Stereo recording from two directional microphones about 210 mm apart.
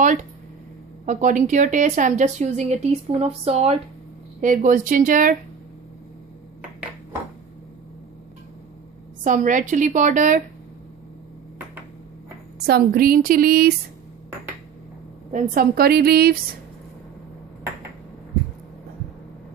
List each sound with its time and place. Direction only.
0.0 s a sound: 35° right (ahead or behind)
1.0 s speech: 35° right (ahead or behind)
4.4 s speech: 40° right (ahead or behind)
9.2 s speech: 40° right (ahead or behind)
12.6 s a woman's voice: 45° right (ahead or behind)
15.3 s a woman's voice: 40° right (ahead or behind)